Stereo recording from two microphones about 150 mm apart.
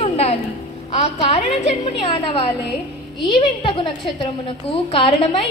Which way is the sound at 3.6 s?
35° left (ahead or behind).